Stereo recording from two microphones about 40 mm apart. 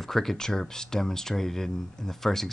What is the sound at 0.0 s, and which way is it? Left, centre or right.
Speech, centre.